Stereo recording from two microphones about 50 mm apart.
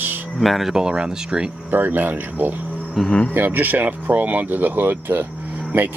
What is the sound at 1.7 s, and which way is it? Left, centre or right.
Speech, right.